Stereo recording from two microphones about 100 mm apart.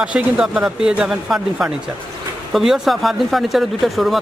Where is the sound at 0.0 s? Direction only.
10° right (ahead or behind).